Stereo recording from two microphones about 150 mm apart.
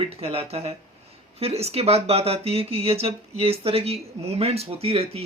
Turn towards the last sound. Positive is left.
turn(degrees=-40)  # may be behind; listen again after turning